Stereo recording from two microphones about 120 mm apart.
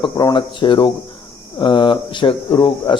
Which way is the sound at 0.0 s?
30° left (ahead or behind).